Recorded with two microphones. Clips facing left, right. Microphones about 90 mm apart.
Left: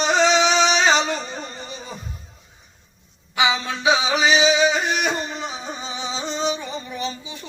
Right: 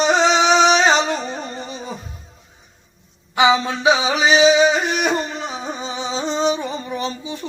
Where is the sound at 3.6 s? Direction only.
40° right (ahead or behind).